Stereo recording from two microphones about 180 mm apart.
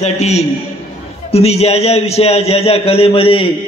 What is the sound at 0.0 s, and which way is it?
A man's voice, 35° left (ahead or behind).